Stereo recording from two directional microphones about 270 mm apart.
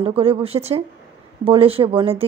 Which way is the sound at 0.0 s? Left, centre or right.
Right.